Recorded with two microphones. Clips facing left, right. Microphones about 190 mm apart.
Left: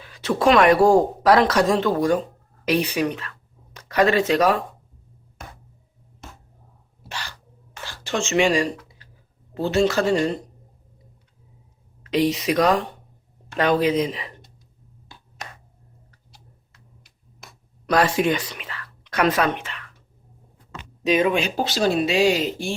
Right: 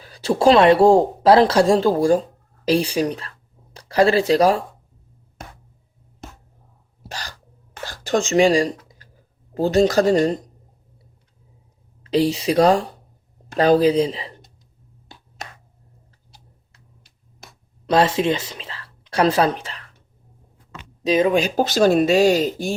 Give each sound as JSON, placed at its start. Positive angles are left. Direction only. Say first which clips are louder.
{"t": 0.0, "sound": "speech", "louder": "right 3 dB", "side_deg": -35}
{"t": 7.1, "sound": "a sound", "louder": "right 1 dB", "side_deg": -40}
{"t": 12.0, "sound": "speech", "louder": "right 2 dB", "side_deg": -30}
{"t": 17.8, "sound": "speech", "louder": "right 2 dB", "side_deg": -25}
{"t": 21.0, "sound": "speech", "louder": "right 2 dB", "side_deg": -35}